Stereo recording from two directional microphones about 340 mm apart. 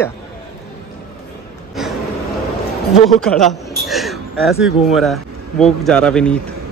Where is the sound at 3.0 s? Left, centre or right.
Centre.